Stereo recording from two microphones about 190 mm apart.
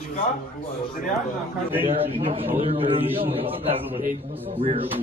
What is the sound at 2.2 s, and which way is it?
Speech, 30° right (ahead or behind).